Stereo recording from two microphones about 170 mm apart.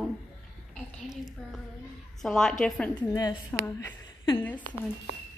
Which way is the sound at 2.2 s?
Centre (ahead or behind).